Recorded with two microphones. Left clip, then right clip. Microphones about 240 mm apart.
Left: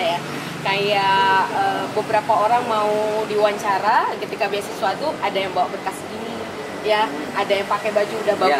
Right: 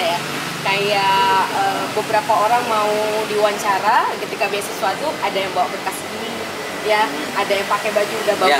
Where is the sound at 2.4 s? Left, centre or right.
Centre.